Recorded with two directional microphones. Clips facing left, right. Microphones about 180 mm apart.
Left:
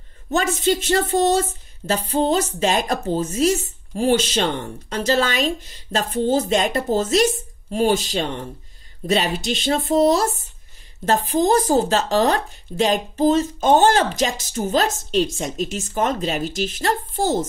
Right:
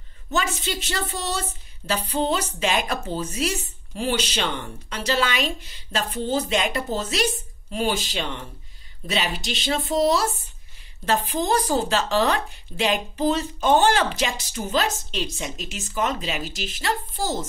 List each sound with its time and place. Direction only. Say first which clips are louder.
0.3 s speech: left 7 dB; 50° left (ahead or behind)